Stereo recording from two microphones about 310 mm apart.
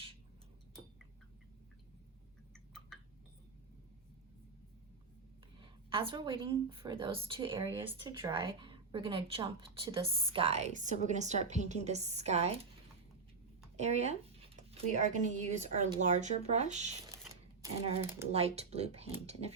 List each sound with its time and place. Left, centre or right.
5.5 s a woman's voice: centre
13.7 s a woman's voice: right
18.3 s a woman's voice: centre